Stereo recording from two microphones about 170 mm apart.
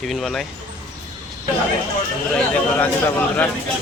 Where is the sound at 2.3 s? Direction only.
10° left (ahead or behind).